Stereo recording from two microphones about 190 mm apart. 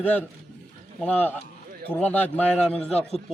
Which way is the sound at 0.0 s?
10° left (ahead or behind).